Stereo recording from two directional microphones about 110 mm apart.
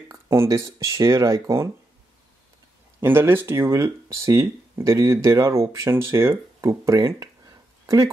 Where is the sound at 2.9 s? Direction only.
20° right (ahead or behind).